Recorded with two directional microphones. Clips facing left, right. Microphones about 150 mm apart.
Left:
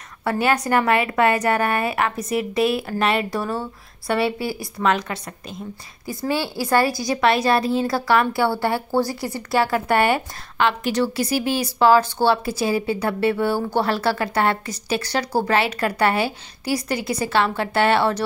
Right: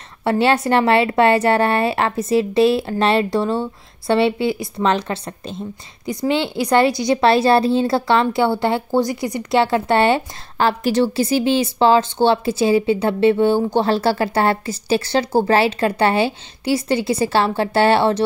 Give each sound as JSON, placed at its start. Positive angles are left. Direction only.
{"t": 0.2, "sound": "a woman's voice", "side_deg": -25}